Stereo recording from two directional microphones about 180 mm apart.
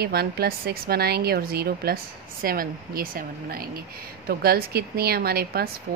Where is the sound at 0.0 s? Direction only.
60° right (ahead or behind).